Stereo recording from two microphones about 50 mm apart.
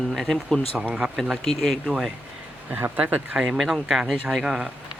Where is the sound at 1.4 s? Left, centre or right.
Centre.